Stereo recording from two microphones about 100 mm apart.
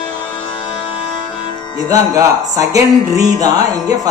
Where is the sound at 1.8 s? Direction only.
35° right (ahead or behind).